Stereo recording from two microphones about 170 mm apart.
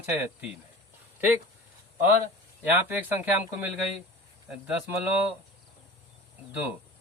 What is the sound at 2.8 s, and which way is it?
Speech, 10° right (ahead or behind).